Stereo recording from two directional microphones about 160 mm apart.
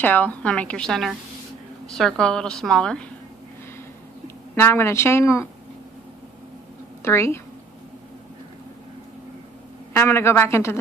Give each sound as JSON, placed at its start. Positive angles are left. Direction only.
{"t": 0.0, "sound": "a woman's voice", "side_deg": 10}
{"t": 4.6, "sound": "a woman's voice", "side_deg": 15}
{"t": 7.0, "sound": "a woman's voice", "side_deg": 15}
{"t": 9.9, "sound": "a woman's voice", "side_deg": 15}